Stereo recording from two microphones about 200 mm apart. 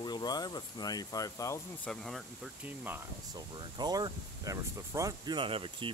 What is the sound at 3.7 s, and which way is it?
Speech, 20° right (ahead or behind).